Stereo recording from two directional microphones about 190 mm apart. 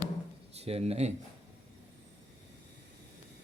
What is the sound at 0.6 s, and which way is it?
Speech, 35° right (ahead or behind).